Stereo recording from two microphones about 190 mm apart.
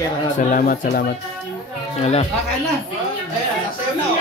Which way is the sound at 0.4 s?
45° left (ahead or behind).